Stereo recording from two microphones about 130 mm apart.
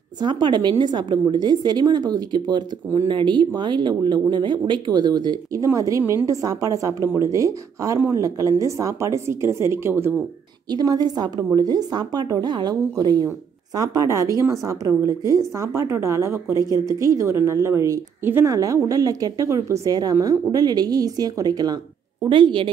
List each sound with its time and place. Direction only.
0.2 s a woman's voice: 35° right (ahead or behind); by 10.1 s 20° right (ahead or behind)
10.7 s a woman's voice: 30° right (ahead or behind)